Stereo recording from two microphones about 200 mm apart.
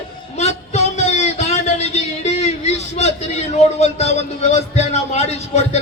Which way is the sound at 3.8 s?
35° left (ahead or behind).